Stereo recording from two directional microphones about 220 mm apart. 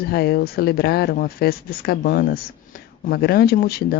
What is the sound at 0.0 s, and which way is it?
Speech, 45° left (ahead or behind).